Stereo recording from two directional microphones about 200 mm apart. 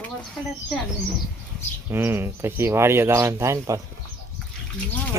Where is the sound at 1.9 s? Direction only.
10° right (ahead or behind).